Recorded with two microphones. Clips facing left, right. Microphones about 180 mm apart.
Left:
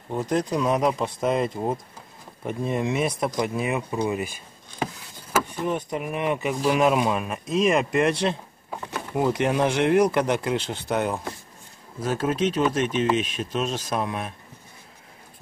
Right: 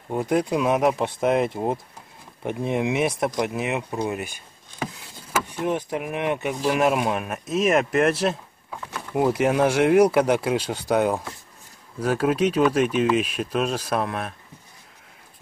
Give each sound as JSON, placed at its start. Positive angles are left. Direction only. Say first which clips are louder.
{"t": 0.1, "sound": "speech", "louder": "right 2 dB", "side_deg": -10}
{"t": 3.4, "sound": "speech", "louder": "even", "side_deg": -75}
{"t": 3.9, "sound": "speech", "louder": "left 1 dB", "side_deg": 0}
{"t": 5.6, "sound": "speech", "louder": "right 1 dB", "side_deg": -5}